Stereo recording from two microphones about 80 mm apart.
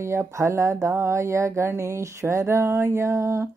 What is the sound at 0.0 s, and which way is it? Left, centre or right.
Speech, right.